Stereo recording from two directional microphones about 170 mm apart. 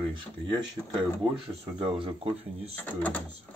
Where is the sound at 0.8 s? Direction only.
5° left (ahead or behind).